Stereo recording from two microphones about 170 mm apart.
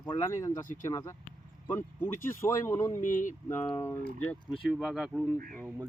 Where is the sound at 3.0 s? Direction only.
50° left (ahead or behind).